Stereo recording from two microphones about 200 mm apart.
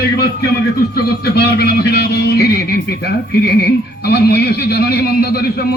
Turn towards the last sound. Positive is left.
turn(degrees=50)  # may be behind; listen again after turning